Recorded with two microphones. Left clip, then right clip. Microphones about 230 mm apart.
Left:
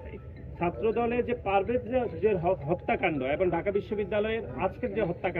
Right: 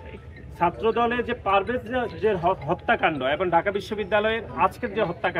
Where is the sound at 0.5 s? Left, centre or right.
Centre.